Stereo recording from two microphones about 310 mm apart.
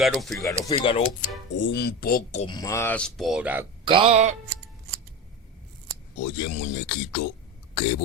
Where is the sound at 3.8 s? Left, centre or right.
Centre.